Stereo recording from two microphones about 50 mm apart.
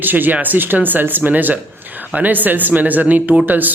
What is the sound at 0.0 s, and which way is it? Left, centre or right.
Speech, right.